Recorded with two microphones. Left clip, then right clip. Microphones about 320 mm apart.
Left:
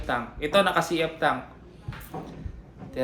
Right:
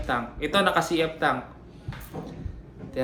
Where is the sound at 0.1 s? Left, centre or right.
Centre.